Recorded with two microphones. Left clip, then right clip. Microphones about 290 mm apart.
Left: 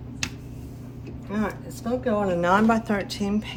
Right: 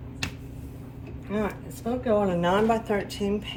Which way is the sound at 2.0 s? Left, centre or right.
Centre.